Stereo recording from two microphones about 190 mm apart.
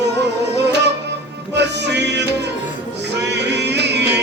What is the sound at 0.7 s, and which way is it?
Music, 65° right (ahead or behind).